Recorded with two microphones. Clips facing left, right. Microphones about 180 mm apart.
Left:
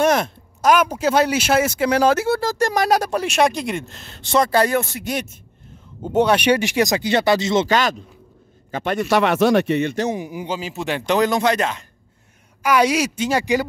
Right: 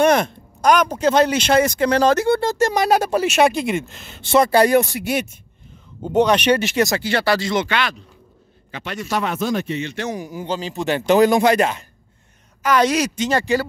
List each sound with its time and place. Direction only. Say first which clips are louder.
0.0 s speech: right 2 dB; centre (ahead or behind)
6.0 s speech: even; 10° left (ahead or behind)
7.6 s a man's voice: left 4 dB; 40° left (ahead or behind)
8.7 s speech: left 6 dB; 55° left (ahead or behind)
10.1 s speech: even; 15° left (ahead or behind); by 11.8 s 10° right (ahead or behind)
12.6 s speech: even; 10° left (ahead or behind)